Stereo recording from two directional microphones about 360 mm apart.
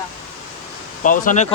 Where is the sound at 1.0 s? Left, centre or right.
Left.